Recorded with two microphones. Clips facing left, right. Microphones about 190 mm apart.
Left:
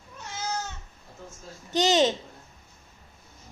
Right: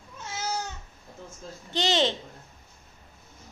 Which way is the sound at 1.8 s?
20° left (ahead or behind).